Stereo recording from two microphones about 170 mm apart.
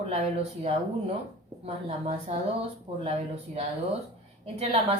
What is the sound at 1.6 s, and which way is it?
Speech, 35° right (ahead or behind).